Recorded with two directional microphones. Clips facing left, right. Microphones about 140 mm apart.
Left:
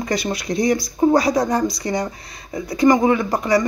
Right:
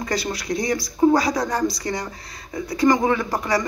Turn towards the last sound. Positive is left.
turn(degrees=20)  # may be behind; listen again after turning